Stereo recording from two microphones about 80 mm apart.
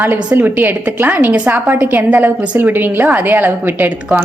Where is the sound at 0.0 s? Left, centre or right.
Right.